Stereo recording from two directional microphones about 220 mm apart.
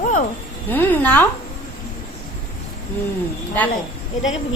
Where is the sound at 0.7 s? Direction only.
10° left (ahead or behind).